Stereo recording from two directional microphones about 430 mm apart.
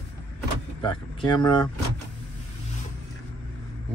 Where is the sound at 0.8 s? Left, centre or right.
Centre.